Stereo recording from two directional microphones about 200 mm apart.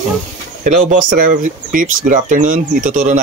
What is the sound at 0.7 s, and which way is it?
Speech, 40° right (ahead or behind).